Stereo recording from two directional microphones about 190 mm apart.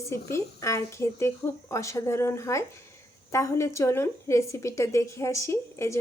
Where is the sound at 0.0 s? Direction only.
15° left (ahead or behind).